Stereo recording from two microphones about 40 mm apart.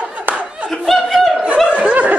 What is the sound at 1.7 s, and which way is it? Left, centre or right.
Snicker, right.